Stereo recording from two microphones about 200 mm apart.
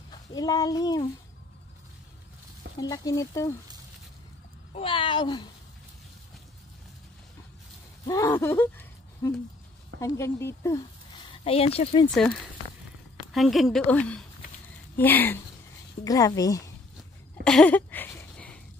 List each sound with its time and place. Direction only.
0.1 s speech: 20° left (ahead or behind)
2.8 s speech: 20° left (ahead or behind)
4.7 s speech: 25° left (ahead or behind)
8.1 s speech: 15° left (ahead or behind)
11.4 s speech: 30° left (ahead or behind)
12.2 s speech: 5° left (ahead or behind)
17.4 s a sound: 5° left (ahead or behind)